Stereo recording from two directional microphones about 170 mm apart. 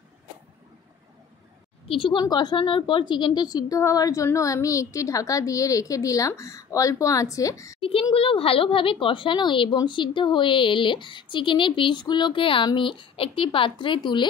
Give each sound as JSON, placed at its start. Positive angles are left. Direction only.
{"t": 1.9, "sound": "a woman's voice", "side_deg": 30}
{"t": 7.8, "sound": "a woman's voice", "side_deg": 35}